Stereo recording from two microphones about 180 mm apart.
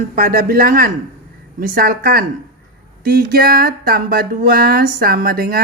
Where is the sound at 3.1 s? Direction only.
55° right (ahead or behind).